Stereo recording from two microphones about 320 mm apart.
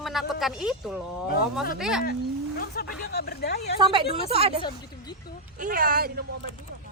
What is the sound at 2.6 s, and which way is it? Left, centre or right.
Speech, left.